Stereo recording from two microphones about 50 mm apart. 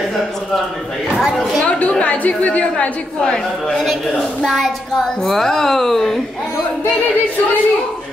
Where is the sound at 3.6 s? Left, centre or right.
Centre.